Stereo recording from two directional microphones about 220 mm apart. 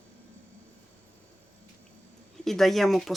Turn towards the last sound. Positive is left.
turn(degrees=0)  # may be behind; listen again after turning